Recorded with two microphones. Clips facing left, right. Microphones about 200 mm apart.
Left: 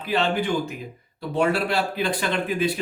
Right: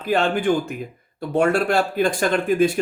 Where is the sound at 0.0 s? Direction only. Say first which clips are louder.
Right 4 dB; 50° right (ahead or behind).